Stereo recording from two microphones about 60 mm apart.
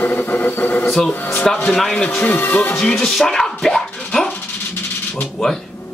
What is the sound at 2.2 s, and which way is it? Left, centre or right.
Speech, left.